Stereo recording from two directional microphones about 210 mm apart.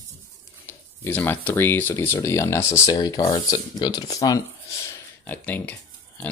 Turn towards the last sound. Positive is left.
turn(degrees=10)  # may be behind; listen again after turning